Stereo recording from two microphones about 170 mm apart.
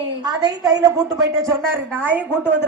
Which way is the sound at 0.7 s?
20° right (ahead or behind).